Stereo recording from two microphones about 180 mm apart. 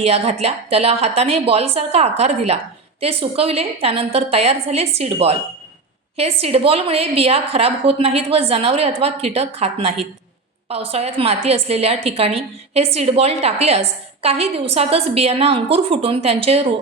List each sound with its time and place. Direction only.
0.0 s a woman's voice: 35° right (ahead or behind)